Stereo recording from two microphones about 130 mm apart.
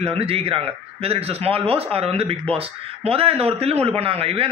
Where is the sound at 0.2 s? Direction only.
50° right (ahead or behind).